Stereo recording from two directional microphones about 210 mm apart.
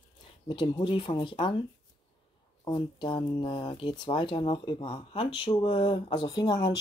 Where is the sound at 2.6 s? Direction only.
20° left (ahead or behind).